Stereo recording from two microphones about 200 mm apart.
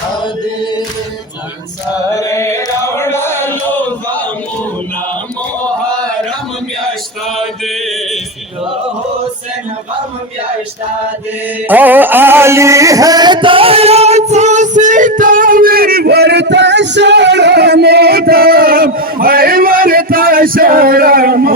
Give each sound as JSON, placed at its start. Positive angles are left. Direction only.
{"t": 0.6, "sound": "music", "side_deg": 20}
{"t": 2.0, "sound": "chant", "side_deg": 15}
{"t": 11.7, "sound": "music", "side_deg": -10}